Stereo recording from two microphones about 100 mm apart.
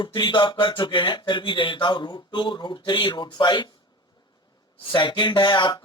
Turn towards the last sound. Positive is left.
turn(degrees=50)  # may be behind; listen again after turning